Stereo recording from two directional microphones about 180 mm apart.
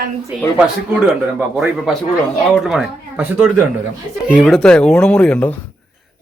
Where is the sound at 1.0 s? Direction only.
5° right (ahead or behind).